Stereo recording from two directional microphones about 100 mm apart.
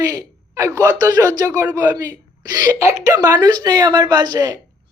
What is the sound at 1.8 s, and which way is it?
Speech, 25° right (ahead or behind).